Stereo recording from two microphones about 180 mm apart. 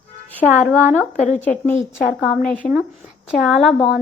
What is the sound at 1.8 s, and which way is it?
Speech, 5° right (ahead or behind).